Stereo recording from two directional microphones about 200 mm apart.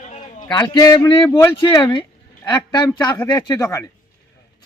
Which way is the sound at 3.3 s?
20° left (ahead or behind).